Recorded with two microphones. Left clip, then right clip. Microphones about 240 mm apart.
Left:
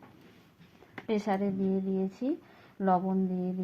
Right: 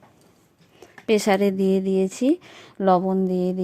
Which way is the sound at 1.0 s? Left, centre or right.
Right.